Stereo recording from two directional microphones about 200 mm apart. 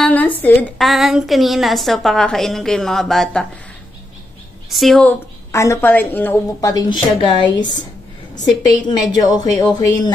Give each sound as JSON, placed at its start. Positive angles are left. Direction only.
{"t": 0.0, "sound": "a woman's voice", "side_deg": 10}
{"t": 4.6, "sound": "a woman's voice", "side_deg": 0}
{"t": 5.5, "sound": "a woman's voice", "side_deg": 15}
{"t": 8.6, "sound": "speech", "side_deg": 20}